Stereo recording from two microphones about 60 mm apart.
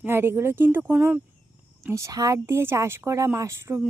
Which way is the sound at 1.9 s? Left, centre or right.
Right.